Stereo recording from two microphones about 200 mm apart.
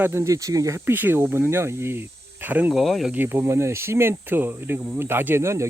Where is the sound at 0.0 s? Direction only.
10° right (ahead or behind).